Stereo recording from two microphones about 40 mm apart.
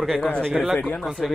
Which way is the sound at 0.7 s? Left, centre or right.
Centre.